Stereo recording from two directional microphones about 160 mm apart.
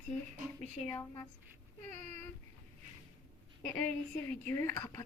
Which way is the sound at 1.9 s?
45° right (ahead or behind).